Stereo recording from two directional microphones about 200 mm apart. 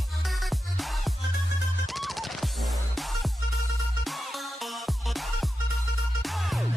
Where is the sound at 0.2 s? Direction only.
Centre (ahead or behind).